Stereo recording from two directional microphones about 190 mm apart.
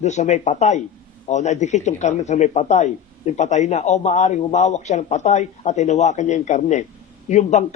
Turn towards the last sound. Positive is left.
turn(degrees=40)  # may be behind; listen again after turning